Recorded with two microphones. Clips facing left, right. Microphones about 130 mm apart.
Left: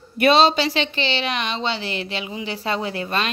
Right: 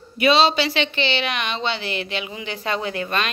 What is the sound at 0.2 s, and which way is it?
A woman's voice, 45° left (ahead or behind).